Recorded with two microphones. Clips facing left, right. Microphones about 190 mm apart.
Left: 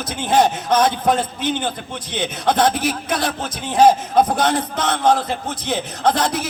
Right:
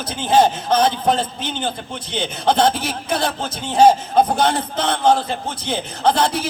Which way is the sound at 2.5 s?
25° right (ahead or behind).